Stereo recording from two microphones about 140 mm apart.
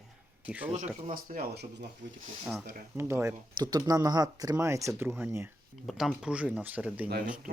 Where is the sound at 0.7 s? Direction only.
65° right (ahead or behind); by 1.4 s 80° right.